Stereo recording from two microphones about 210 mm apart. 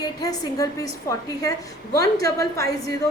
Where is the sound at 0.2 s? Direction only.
15° left (ahead or behind).